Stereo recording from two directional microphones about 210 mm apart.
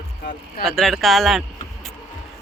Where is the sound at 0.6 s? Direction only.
Centre (ahead or behind).